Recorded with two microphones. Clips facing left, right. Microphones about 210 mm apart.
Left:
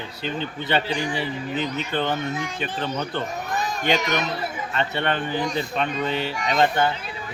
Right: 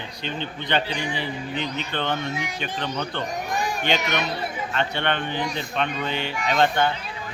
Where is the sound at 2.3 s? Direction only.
10° right (ahead or behind).